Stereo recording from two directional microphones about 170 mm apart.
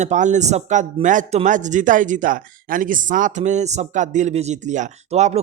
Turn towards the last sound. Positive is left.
turn(degrees=-40)  # may be behind; listen again after turning